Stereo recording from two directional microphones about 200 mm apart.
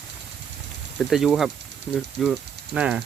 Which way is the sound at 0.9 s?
Centre (ahead or behind).